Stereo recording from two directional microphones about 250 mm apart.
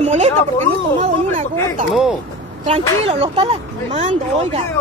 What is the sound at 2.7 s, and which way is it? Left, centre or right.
Speech, right.